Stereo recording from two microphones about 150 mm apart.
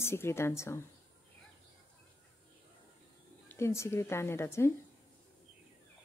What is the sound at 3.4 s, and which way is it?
A woman's voice, 15° left (ahead or behind).